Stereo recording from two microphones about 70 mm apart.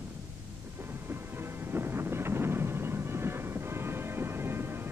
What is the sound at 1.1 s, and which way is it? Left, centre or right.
Thunder, right.